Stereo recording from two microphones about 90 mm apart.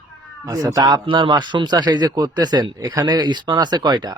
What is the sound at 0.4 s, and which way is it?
Speech, 40° right (ahead or behind).